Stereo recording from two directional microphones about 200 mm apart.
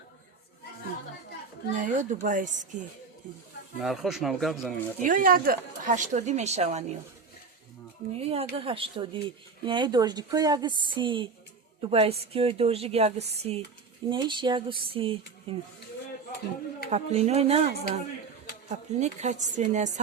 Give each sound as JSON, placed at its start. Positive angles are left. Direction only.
{"t": 1.8, "sound": "a woman's voice", "side_deg": -40}
{"t": 3.8, "sound": "speech", "side_deg": 0}
{"t": 5.0, "sound": "a woman's voice", "side_deg": -40}
{"t": 8.1, "sound": "a woman's voice", "side_deg": -30}
{"t": 16.9, "sound": "a woman's voice", "side_deg": -35}